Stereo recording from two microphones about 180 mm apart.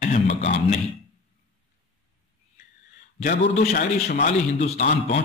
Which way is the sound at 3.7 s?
50° left (ahead or behind).